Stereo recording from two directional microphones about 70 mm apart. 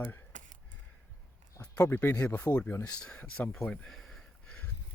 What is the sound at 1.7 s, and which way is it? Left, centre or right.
Speech, left.